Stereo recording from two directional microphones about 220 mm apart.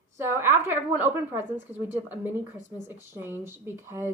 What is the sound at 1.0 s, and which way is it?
A woman's voice, 10° right (ahead or behind).